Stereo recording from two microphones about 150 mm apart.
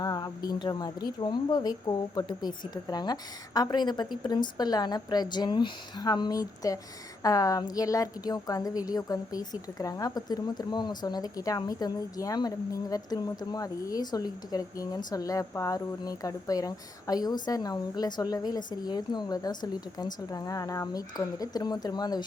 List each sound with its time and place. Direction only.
0.0 s a woman's voice: 25° left (ahead or behind)